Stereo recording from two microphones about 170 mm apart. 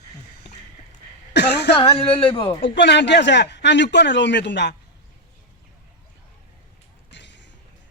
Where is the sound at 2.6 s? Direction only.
90° left.